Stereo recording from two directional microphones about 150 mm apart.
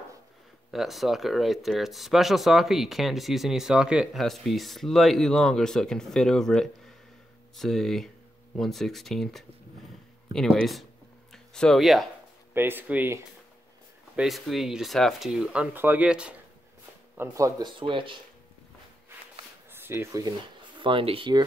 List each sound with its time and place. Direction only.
0.7 s speech: centre (ahead or behind)
12.5 s speech: 15° right (ahead or behind)
14.1 s speech: centre (ahead or behind)
17.2 s speech: 20° right (ahead or behind)
17.7 s speech: 35° right (ahead or behind)
19.7 s speech: 15° right (ahead or behind)
20.8 s speech: 35° right (ahead or behind)